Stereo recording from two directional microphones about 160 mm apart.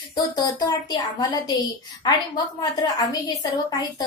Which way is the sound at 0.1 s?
25° left (ahead or behind).